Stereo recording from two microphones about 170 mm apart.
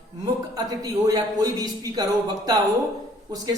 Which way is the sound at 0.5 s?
20° right (ahead or behind).